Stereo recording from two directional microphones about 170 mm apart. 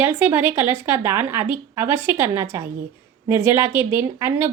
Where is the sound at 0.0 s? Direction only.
10° right (ahead or behind).